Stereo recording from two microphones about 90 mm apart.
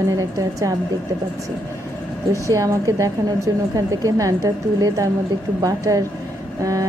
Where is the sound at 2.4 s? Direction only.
35° right (ahead or behind).